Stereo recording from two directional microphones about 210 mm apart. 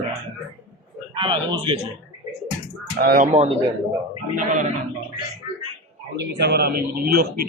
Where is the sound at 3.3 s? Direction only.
30° right (ahead or behind).